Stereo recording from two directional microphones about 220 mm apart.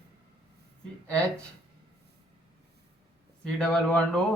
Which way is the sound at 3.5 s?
5° left (ahead or behind).